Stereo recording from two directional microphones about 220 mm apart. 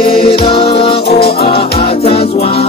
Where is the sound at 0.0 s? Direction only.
20° left (ahead or behind).